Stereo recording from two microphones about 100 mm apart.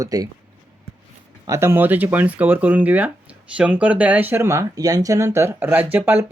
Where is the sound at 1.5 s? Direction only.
25° right (ahead or behind).